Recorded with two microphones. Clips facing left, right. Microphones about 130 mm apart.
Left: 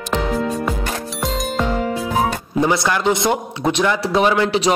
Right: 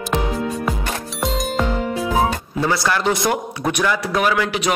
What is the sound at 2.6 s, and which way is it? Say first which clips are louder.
A man's voice: left 2 dB; 20° left (ahead or behind).